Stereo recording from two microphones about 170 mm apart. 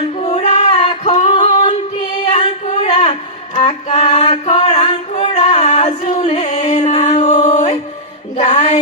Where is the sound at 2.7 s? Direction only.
30° left (ahead or behind).